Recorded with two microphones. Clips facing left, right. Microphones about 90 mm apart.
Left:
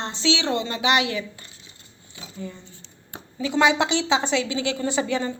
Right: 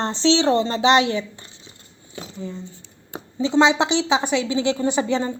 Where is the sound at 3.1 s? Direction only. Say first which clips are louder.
Right 5 dB; 25° right (ahead or behind).